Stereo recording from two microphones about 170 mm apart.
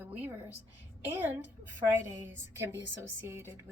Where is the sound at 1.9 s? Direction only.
15° right (ahead or behind).